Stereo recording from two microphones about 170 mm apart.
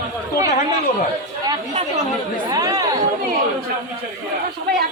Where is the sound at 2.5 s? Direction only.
20° right (ahead or behind).